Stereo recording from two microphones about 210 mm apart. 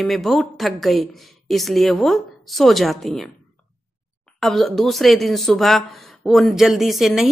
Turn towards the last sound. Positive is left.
turn(degrees=0)  # may be behind; listen again after turning